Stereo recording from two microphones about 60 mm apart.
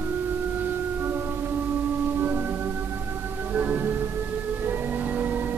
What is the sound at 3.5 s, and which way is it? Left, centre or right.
Music, right.